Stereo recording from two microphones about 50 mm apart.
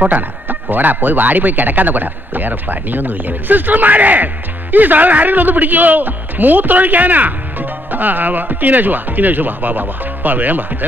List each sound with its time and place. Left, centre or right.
0.0 s speech: right